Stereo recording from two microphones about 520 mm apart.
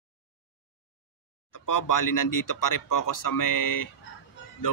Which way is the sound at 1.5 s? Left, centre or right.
Left.